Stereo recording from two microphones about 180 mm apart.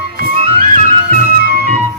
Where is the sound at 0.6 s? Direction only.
50° right (ahead or behind).